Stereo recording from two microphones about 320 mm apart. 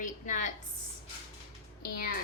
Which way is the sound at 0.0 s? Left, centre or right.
Left.